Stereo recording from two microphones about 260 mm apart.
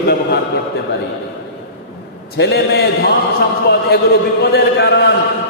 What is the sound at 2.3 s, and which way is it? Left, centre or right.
Speech, left.